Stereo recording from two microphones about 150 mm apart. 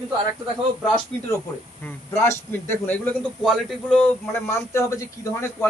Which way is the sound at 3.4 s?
5° left (ahead or behind).